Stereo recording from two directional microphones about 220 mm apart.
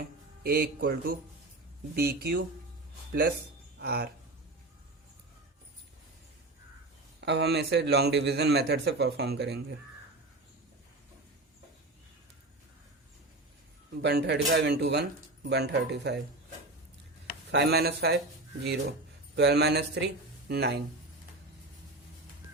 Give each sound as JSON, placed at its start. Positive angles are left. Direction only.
{"t": 0.4, "sound": "a man's voice", "side_deg": -40}
{"t": 3.8, "sound": "speech", "side_deg": -45}
{"t": 7.2, "sound": "a man's voice", "side_deg": -50}
{"t": 14.0, "sound": "a man's voice", "side_deg": -55}
{"t": 17.5, "sound": "a man's voice", "side_deg": -50}